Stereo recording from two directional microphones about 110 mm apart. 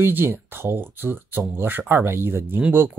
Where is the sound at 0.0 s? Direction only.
20° right (ahead or behind).